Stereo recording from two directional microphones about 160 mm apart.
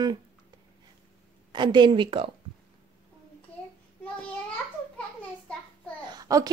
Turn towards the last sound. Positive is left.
turn(degrees=-25)  # may be behind; listen again after turning